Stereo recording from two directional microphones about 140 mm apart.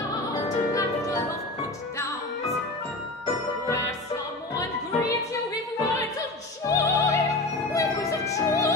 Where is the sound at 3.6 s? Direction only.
20° left (ahead or behind).